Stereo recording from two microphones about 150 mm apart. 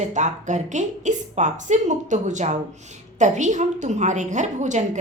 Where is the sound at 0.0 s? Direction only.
55° right (ahead or behind).